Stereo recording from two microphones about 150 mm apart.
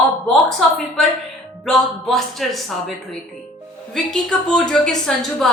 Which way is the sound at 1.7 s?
Centre (ahead or behind).